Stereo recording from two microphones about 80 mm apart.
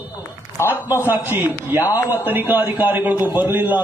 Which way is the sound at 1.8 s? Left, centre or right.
Left.